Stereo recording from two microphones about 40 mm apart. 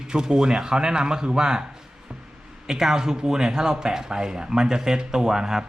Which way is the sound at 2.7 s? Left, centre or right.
Centre.